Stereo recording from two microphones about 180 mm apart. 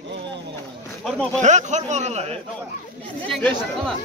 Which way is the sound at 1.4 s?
40° right (ahead or behind).